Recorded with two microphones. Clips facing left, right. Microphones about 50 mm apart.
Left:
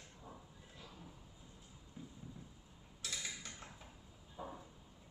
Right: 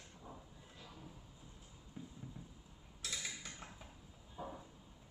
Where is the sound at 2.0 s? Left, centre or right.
Centre.